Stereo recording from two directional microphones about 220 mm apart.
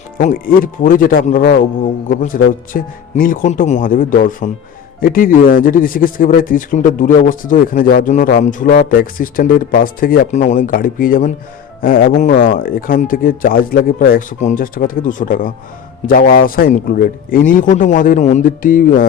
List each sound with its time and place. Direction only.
0.2 s a man's voice: 40° left (ahead or behind)